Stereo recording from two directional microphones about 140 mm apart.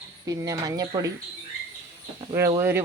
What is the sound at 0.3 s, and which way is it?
Speech, 25° right (ahead or behind).